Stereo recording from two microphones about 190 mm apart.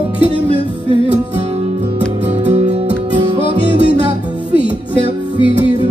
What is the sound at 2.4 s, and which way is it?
Music, 35° right (ahead or behind).